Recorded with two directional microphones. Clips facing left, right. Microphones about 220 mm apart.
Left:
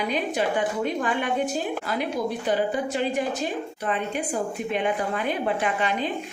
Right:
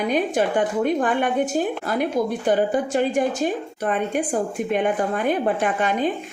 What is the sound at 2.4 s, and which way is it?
A woman's voice, 50° right (ahead or behind).